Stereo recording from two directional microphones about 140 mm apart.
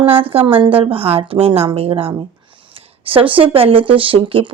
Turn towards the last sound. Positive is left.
turn(degrees=-40)  # may be behind; listen again after turning